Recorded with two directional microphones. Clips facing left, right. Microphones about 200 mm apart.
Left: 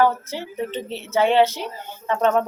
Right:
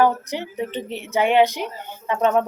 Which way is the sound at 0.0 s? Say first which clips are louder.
Right 1 dB; 15° right (ahead or behind).